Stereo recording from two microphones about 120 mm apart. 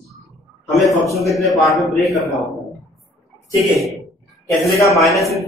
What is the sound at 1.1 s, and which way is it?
Speech, centre (ahead or behind).